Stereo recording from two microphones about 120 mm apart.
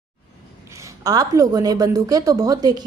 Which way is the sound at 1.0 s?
30° right (ahead or behind).